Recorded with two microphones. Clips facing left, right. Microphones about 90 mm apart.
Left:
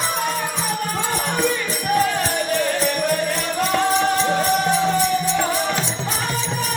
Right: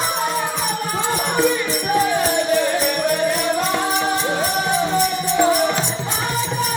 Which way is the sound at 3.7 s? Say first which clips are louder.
Left 1 dB; 10° right (ahead or behind).